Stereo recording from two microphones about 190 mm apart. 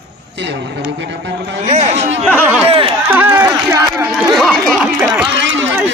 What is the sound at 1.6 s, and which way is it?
Speech, 35° right (ahead or behind).